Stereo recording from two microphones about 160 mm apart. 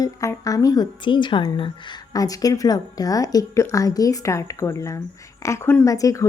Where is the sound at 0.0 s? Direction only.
20° left (ahead or behind).